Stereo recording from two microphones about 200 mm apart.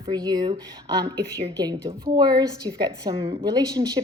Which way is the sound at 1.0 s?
55° right (ahead or behind).